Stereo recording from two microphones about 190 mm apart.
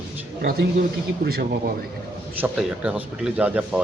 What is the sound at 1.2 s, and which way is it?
Speech, 55° right (ahead or behind).